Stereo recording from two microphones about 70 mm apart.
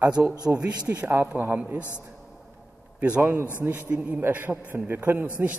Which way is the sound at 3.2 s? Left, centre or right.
Right.